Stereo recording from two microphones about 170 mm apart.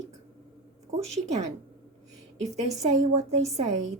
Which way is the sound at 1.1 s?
40° right (ahead or behind).